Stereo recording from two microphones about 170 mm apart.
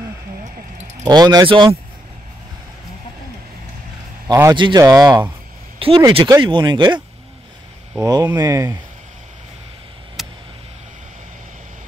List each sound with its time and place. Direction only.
1.0 s speech: 25° right (ahead or behind)
4.3 s speech: 20° right (ahead or behind)
8.0 s speech: 20° right (ahead or behind)
10.2 s a sound: centre (ahead or behind)